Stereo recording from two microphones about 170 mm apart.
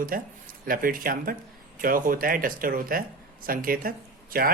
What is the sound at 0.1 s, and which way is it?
Speech, 55° right (ahead or behind).